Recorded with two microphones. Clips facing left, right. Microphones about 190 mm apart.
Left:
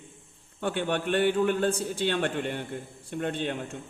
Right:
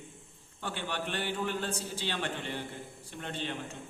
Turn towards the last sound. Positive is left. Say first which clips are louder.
# left 8 dB
turn(degrees=55)  # may be behind; listen again after turning